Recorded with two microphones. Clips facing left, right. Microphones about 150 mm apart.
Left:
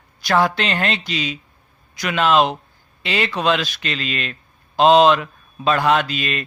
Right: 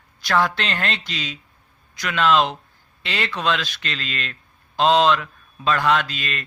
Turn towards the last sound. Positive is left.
turn(degrees=15)  # may be behind; listen again after turning